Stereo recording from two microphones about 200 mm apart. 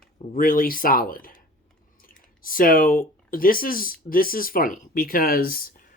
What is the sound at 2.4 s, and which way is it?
A woman's voice, 45° left (ahead or behind).